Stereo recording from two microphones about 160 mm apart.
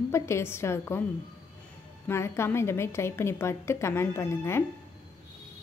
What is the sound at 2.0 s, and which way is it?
A woman's voice, 15° left (ahead or behind).